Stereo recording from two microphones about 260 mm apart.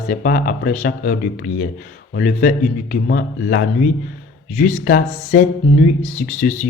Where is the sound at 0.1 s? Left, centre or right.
Left.